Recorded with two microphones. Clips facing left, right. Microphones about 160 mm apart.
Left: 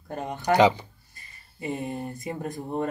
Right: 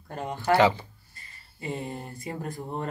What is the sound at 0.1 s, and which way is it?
Speech, 20° left (ahead or behind).